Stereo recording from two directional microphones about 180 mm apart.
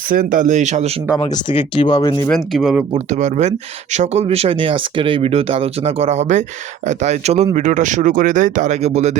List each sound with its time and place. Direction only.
0.1 s speech: 50° right (ahead or behind)
1.2 s speech: 30° left (ahead or behind)
2.2 s speech: centre (ahead or behind)
2.9 s speech: 40° right (ahead or behind)